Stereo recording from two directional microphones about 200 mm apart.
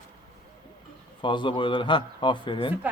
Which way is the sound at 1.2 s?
25° left (ahead or behind).